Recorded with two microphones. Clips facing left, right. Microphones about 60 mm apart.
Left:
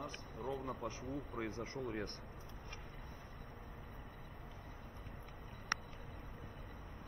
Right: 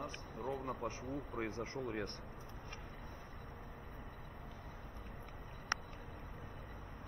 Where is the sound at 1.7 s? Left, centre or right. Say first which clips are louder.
Right 1 dB; right.